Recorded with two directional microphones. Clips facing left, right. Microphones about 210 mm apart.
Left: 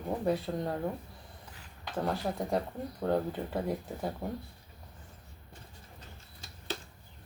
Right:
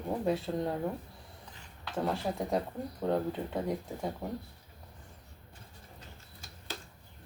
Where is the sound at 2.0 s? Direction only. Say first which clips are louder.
Even; centre (ahead or behind).